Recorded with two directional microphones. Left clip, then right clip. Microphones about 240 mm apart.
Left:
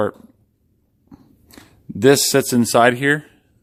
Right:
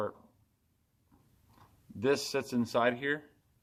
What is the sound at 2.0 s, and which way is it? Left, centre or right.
Speech, left.